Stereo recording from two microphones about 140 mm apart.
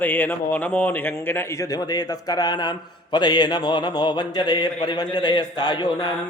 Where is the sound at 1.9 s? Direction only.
30° left (ahead or behind).